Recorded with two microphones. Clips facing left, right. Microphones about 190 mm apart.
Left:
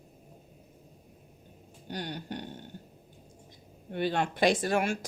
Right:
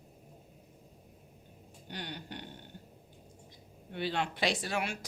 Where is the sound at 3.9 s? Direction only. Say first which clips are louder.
Left 5 dB; 50° left (ahead or behind).